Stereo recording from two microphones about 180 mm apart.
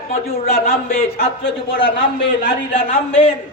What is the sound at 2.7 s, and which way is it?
Speech, 30° left (ahead or behind).